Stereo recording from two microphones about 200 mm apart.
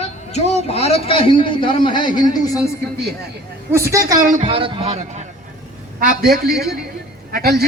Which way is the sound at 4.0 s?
45° right (ahead or behind).